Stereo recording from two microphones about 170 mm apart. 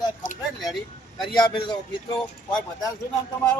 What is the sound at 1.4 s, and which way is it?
Speech, 25° left (ahead or behind).